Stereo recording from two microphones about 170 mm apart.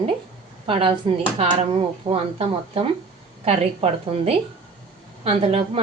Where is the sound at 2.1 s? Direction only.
35° right (ahead or behind).